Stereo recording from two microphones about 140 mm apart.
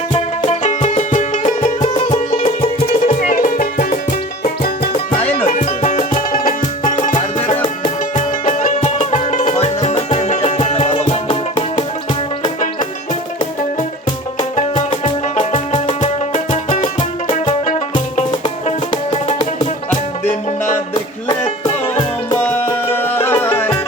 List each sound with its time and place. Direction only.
0.1 s music: 50° left (ahead or behind)
1.9 s music: 40° left (ahead or behind)
3.2 s music: 70° left (ahead or behind)
5.5 s music: 60° left (ahead or behind)
6.3 s music: 80° left
8.4 s music: 60° left (ahead or behind)
15.0 s music: 40° left (ahead or behind)
21.2 s music: 35° left (ahead or behind)
22.4 s music: 15° left (ahead or behind)